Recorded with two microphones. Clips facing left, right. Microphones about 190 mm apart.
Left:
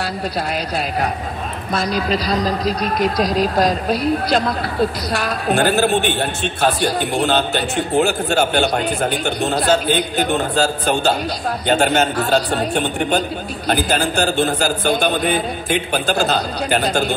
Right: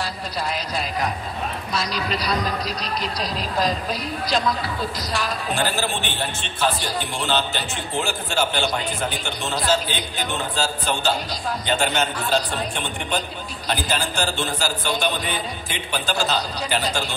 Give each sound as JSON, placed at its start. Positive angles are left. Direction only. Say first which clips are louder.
{"t": 0.7, "sound": "a man's voice", "louder": "left 5 dB", "side_deg": 60}
{"t": 2.0, "sound": "speech", "louder": "left 6 dB", "side_deg": 35}
{"t": 2.6, "sound": "speech", "louder": "left 9 dB", "side_deg": 50}
{"t": 3.5, "sound": "a man's voice", "louder": "left 6 dB", "side_deg": 65}